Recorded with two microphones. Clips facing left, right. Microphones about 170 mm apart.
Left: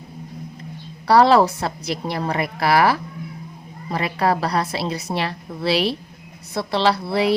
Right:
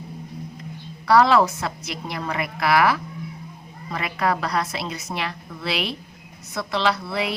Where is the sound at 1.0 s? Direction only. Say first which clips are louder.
Left 3 dB; 35° left (ahead or behind).